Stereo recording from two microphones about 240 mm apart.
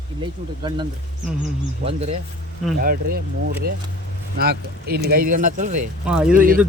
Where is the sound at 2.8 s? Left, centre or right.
Right.